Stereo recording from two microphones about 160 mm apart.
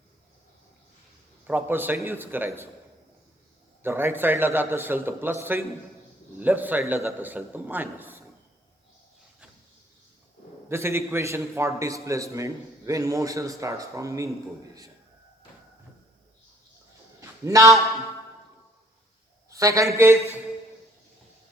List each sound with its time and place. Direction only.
1.5 s a man's voice: 15° right (ahead or behind)
3.8 s a man's voice: 15° right (ahead or behind)
10.7 s a man's voice: 15° right (ahead or behind)
17.2 s a sound: 20° right (ahead or behind)
19.5 s a man's voice: 20° right (ahead or behind)